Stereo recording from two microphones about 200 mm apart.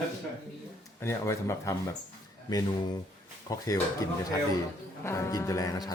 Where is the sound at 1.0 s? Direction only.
15° left (ahead or behind).